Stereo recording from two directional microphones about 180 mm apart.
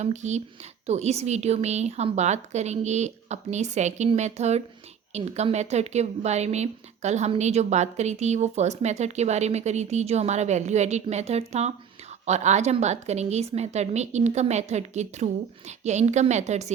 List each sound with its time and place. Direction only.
0.0 s speech: 40° right (ahead or behind)